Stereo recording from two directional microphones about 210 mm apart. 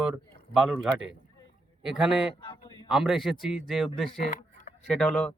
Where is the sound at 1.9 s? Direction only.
5° right (ahead or behind).